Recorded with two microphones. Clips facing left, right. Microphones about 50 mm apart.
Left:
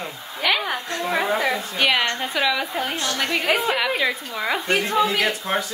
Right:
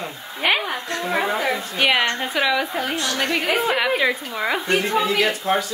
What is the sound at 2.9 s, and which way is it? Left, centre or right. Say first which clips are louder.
Speech: right 2 dB; left.